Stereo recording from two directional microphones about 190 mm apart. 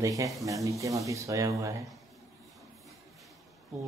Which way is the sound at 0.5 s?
15° right (ahead or behind).